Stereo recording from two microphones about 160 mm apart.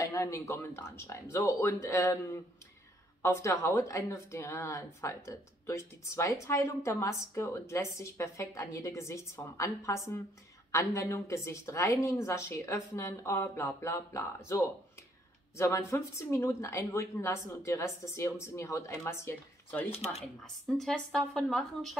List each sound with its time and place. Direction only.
0.0 s speech: 20° left (ahead or behind)
20.4 s a woman's voice: centre (ahead or behind)